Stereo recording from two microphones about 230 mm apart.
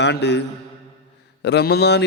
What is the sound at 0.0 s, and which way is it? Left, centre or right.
A man's voice, left.